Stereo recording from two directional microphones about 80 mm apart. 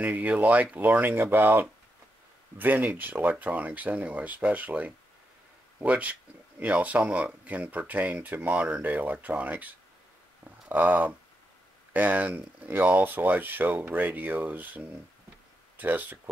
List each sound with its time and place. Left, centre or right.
0.0 s speech: right